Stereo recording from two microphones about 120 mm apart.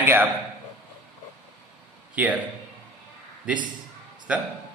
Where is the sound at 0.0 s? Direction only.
15° right (ahead or behind).